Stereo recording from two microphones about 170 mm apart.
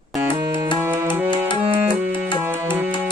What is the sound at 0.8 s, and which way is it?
Music, 10° right (ahead or behind).